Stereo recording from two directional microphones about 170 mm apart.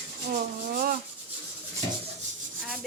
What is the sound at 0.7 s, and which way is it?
Rub, 55° right (ahead or behind).